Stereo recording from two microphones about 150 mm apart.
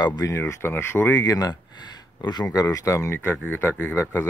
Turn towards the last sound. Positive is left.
turn(degrees=15)  # may be behind; listen again after turning